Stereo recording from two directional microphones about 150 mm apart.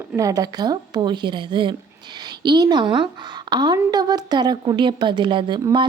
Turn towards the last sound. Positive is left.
turn(degrees=-30)  # may be behind; listen again after turning